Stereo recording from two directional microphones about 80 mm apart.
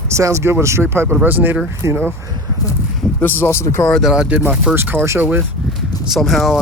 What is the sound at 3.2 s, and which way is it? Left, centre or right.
Speech, left.